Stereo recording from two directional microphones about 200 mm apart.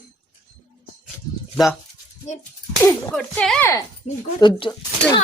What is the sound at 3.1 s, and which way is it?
Speech, centre (ahead or behind).